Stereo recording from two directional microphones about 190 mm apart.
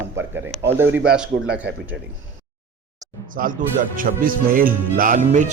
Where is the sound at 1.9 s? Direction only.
65° right (ahead or behind).